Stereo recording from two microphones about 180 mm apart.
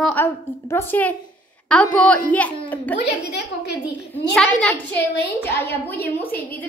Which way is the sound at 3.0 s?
70° left (ahead or behind).